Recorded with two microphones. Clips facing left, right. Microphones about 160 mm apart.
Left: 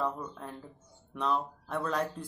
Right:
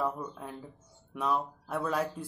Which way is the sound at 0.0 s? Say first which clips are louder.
Right 1 dB; 5° right (ahead or behind).